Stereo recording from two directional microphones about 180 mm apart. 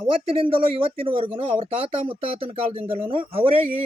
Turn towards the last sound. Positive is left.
turn(degrees=-30)  # may be behind; listen again after turning